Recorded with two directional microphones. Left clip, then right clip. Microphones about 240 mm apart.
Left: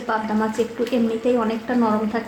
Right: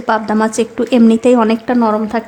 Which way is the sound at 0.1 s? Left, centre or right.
Right.